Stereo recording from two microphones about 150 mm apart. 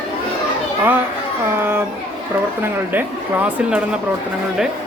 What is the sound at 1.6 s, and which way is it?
Speech, 15° right (ahead or behind).